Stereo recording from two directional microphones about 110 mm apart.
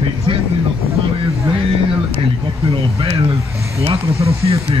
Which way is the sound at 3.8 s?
65° right (ahead or behind).